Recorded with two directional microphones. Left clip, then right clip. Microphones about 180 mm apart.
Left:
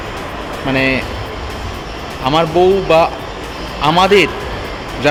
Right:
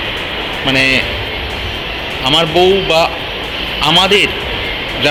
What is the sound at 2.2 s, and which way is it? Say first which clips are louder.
A man's voice: right 1 dB; 15° left (ahead or behind).